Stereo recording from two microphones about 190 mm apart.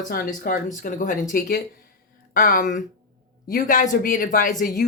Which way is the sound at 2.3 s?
45° left (ahead or behind).